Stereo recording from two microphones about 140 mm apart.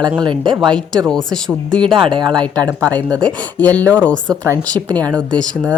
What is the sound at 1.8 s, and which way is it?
Speech, 35° right (ahead or behind).